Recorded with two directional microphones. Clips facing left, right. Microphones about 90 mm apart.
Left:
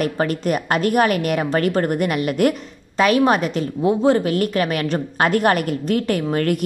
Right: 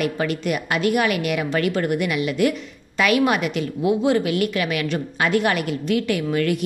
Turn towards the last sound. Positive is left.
turn(degrees=45)  # may be behind; listen again after turning